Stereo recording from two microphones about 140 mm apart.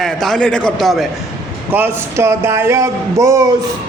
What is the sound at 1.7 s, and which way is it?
Speech, 15° right (ahead or behind).